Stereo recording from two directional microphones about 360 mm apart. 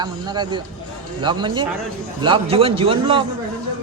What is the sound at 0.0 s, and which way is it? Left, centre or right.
Speech, centre.